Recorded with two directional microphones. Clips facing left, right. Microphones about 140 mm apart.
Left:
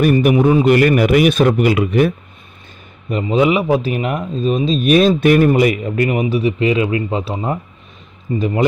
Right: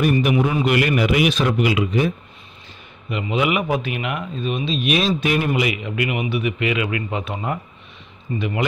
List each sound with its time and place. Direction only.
0.0 s a man's voice: 50° left (ahead or behind)
3.1 s speech: 35° left (ahead or behind)